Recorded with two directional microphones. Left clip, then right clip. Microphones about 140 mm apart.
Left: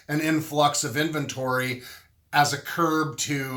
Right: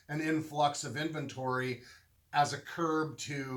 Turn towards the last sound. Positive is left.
turn(degrees=25)  # may be behind; listen again after turning